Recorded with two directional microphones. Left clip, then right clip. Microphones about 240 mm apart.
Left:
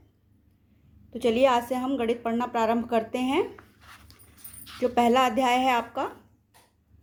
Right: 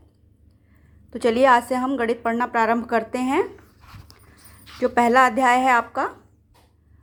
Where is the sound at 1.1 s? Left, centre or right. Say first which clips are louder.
Right 6 dB; centre.